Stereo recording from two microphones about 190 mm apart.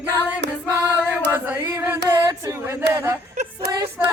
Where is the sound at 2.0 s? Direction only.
15° right (ahead or behind).